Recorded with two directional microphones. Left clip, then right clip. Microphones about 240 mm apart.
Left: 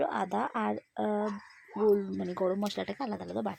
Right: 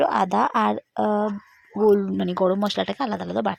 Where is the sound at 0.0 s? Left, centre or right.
Right.